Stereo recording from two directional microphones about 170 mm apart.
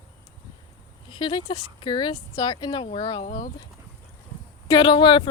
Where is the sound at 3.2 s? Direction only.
50° left (ahead or behind).